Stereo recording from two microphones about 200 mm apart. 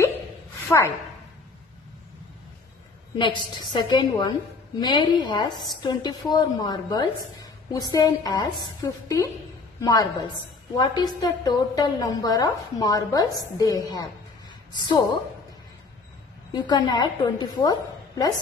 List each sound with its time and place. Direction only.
0.7 s a woman's voice: 15° left (ahead or behind)
3.2 s a woman's voice: 25° left (ahead or behind)
16.5 s a woman's voice: 20° left (ahead or behind)